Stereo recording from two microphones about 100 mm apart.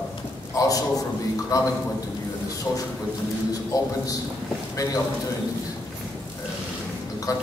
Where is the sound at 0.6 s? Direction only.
35° left (ahead or behind).